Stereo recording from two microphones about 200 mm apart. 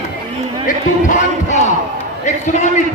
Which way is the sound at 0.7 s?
40° left (ahead or behind).